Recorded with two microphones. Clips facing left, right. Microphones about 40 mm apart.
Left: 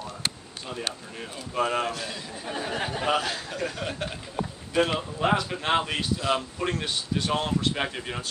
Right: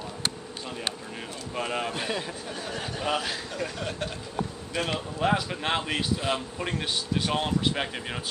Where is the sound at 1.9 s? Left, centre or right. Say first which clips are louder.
Right 5 dB; right.